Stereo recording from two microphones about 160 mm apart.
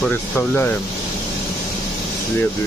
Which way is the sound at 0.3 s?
15° left (ahead or behind).